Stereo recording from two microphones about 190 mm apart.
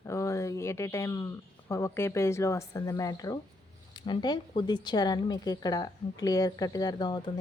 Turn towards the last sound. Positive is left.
turn(degrees=20)  # may be behind; listen again after turning